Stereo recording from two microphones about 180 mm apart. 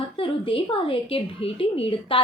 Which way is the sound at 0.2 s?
30° left (ahead or behind).